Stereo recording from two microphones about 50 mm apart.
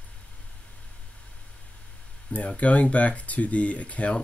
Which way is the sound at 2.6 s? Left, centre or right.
Left.